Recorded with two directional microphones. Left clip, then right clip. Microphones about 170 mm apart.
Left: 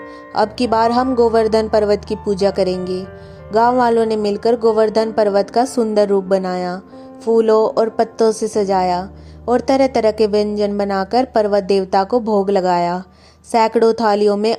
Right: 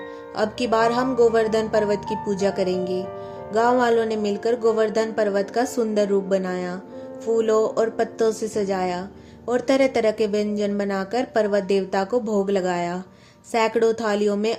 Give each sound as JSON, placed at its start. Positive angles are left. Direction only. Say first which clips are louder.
{"t": 0.3, "sound": "speech", "louder": "left 6 dB", "side_deg": 40}